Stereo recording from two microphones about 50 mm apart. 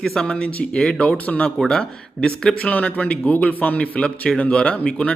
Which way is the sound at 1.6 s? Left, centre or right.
Centre.